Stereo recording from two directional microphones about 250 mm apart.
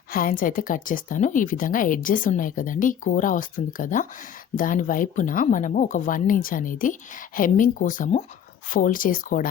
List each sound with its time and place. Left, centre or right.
0.1 s speech: left